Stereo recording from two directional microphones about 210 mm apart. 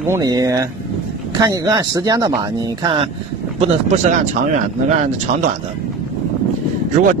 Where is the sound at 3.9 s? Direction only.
40° right (ahead or behind).